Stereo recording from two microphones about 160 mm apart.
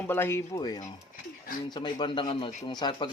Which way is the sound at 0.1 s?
15° left (ahead or behind).